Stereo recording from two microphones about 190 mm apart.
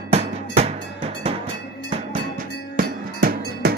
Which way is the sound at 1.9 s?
40° right (ahead or behind).